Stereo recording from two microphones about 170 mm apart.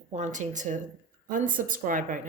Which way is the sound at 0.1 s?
45° right (ahead or behind).